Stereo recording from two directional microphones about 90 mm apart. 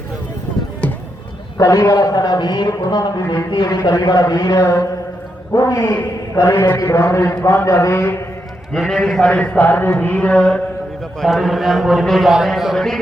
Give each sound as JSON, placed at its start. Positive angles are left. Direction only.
{"t": 1.5, "sound": "a man's voice", "side_deg": 35}
{"t": 8.9, "sound": "a man's voice", "side_deg": 0}
{"t": 9.2, "sound": "speech", "side_deg": 15}
{"t": 11.2, "sound": "a man's voice", "side_deg": 0}